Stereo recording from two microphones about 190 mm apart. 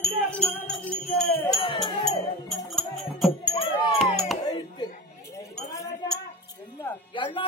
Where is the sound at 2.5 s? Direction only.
Centre (ahead or behind).